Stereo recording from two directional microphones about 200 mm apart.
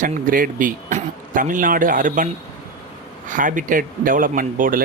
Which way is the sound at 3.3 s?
40° right (ahead or behind).